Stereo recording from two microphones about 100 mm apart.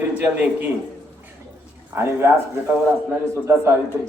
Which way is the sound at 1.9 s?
25° right (ahead or behind).